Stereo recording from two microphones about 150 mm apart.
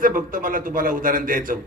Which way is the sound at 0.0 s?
65° right (ahead or behind).